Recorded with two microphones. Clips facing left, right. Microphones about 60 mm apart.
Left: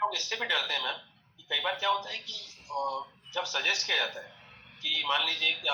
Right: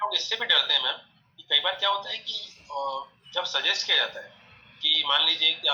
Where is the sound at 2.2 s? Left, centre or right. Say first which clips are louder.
Right 6 dB; left.